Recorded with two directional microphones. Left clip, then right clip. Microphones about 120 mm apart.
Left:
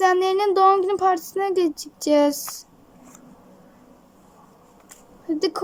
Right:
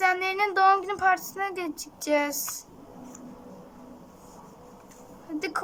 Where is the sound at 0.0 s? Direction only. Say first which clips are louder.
Left 6 dB; 60° left (ahead or behind).